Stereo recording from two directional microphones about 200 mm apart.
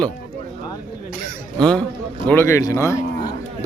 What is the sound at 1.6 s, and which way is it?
Speech, 5° left (ahead or behind).